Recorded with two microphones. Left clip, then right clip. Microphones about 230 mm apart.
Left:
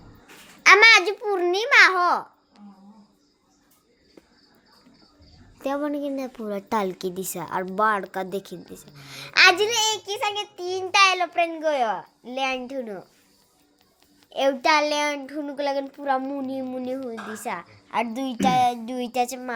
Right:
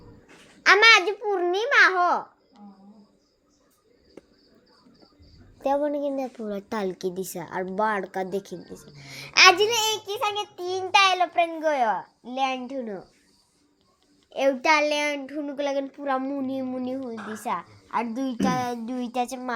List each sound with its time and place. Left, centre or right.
0.6 s a child's voice: centre
5.5 s a woman's voice: centre
14.3 s a child's voice: centre
17.9 s a woman's voice: left; by 19.5 s centre